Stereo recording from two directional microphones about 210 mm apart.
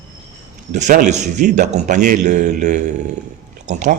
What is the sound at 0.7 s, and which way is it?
Speech, 35° right (ahead or behind).